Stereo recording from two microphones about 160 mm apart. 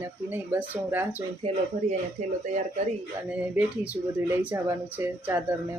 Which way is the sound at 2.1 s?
45° right (ahead or behind).